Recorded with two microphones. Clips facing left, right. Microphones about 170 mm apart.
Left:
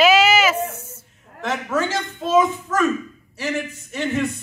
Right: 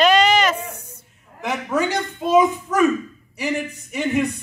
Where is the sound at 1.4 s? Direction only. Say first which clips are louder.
Right 1 dB; 15° right (ahead or behind).